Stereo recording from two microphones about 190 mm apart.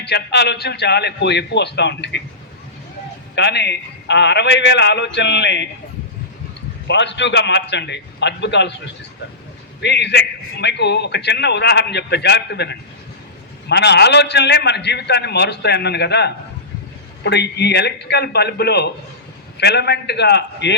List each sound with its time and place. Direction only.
0.0 s a man's voice: 60° left (ahead or behind)
3.3 s a man's voice: 60° left (ahead or behind)
6.8 s a man's voice: 70° left (ahead or behind)
9.8 s a man's voice: 65° left (ahead or behind)